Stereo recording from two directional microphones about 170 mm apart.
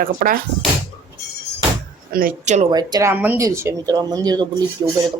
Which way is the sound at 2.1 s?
50° right (ahead or behind).